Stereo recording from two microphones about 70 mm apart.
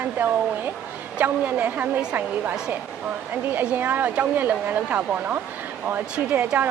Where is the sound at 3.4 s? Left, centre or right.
Right.